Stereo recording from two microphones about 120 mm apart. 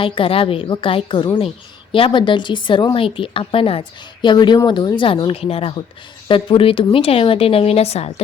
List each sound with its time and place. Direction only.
0.0 s a woman's voice: 50° left (ahead or behind)